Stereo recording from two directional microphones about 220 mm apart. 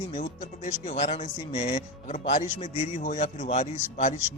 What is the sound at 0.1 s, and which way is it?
A man's voice, 35° left (ahead or behind).